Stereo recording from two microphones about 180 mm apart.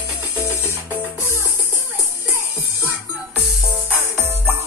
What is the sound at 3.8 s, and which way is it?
Music, 10° right (ahead or behind).